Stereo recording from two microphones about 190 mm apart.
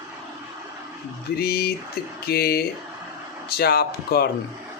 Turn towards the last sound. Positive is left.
turn(degrees=55)  # may be behind; listen again after turning